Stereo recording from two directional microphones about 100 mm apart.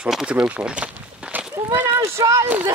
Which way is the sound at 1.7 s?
20° right (ahead or behind).